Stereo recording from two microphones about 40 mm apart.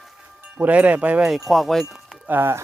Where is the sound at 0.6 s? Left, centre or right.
Right.